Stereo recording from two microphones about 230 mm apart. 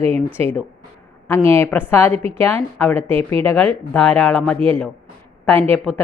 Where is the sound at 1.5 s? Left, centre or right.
Centre.